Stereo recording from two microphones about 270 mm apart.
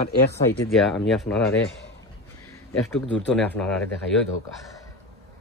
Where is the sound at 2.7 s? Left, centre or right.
Centre.